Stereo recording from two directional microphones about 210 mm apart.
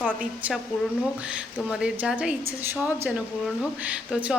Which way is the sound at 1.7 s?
5° right (ahead or behind).